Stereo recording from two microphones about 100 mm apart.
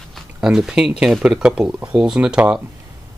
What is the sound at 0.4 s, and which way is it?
Speech, 5° right (ahead or behind).